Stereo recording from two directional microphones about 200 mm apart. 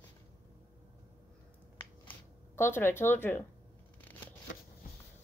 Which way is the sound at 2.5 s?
10° left (ahead or behind).